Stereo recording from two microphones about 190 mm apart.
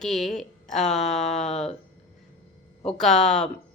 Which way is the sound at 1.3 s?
35° left (ahead or behind).